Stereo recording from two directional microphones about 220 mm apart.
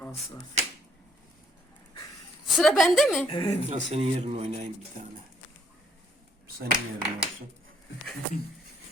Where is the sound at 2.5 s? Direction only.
Centre (ahead or behind).